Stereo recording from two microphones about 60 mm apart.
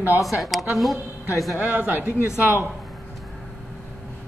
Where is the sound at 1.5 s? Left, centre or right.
Right.